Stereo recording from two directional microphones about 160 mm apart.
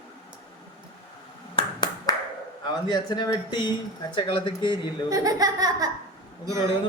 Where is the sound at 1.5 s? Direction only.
25° left (ahead or behind).